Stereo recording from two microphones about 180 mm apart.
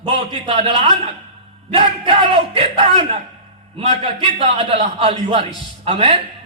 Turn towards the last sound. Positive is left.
turn(degrees=-30)  # may be behind; listen again after turning